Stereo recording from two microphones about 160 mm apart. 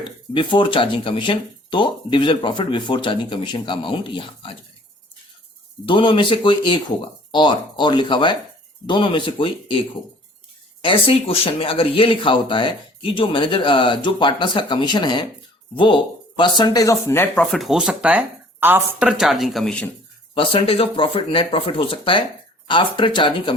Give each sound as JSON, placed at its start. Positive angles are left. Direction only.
{"t": 0.3, "sound": "speech", "side_deg": 30}
{"t": 5.9, "sound": "speech", "side_deg": 30}
{"t": 10.8, "sound": "speech", "side_deg": 35}
{"t": 20.3, "sound": "speech", "side_deg": 35}